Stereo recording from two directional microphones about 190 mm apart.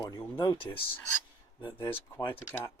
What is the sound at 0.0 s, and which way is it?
Speech, 20° left (ahead or behind).